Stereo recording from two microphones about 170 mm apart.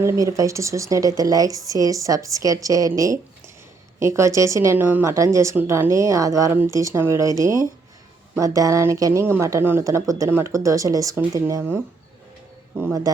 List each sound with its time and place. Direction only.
0.0 s speech: 15° right (ahead or behind)